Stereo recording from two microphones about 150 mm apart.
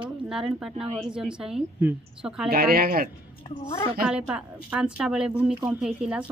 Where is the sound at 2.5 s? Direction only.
85° right.